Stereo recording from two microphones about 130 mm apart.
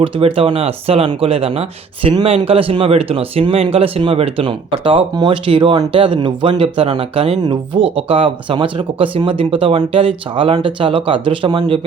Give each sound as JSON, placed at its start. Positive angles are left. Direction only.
{"t": 0.0, "sound": "speech", "side_deg": -45}